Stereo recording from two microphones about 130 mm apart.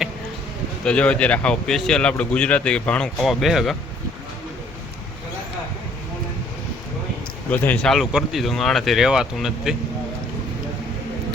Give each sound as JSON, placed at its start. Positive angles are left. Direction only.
{"t": 0.9, "sound": "speech", "side_deg": 10}
{"t": 7.5, "sound": "speech", "side_deg": 15}
{"t": 7.9, "sound": "speech", "side_deg": 0}